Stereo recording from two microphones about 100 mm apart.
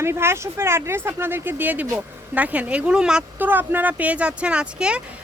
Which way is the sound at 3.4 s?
20° right (ahead or behind).